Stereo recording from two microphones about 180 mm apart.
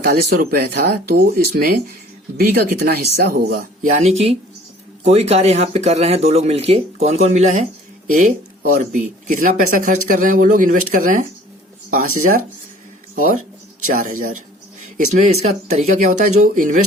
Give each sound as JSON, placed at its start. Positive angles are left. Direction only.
{"t": 0.0, "sound": "speech", "side_deg": -55}
{"t": 3.3, "sound": "speech", "side_deg": -55}
{"t": 3.9, "sound": "speech", "side_deg": -35}